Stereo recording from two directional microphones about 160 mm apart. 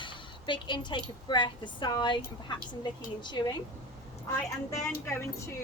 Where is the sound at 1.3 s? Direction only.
30° left (ahead or behind).